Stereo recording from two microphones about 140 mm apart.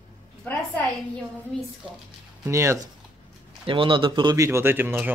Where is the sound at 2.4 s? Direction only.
20° right (ahead or behind).